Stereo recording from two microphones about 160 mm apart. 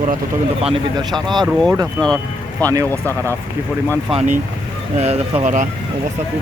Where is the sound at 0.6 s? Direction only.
35° right (ahead or behind).